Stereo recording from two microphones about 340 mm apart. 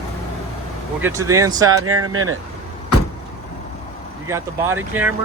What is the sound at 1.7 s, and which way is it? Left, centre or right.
Speech, right.